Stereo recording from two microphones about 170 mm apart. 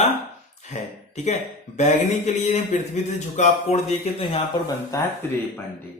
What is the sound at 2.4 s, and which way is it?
A man's voice, 45° left (ahead or behind).